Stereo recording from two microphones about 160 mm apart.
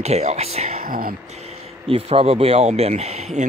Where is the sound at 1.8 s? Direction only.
35° right (ahead or behind).